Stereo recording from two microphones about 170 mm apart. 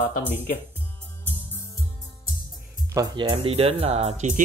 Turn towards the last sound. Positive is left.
turn(degrees=-40)  # may be behind; listen again after turning